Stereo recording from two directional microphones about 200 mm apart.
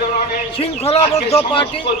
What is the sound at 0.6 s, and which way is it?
Speech, 30° left (ahead or behind).